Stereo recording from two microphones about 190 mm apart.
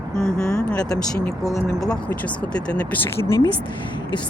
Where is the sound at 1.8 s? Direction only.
5° left (ahead or behind).